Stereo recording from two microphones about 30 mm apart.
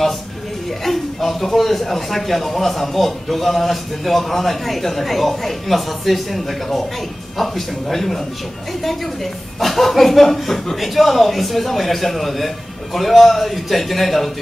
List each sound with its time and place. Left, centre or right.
0.7 s speech: centre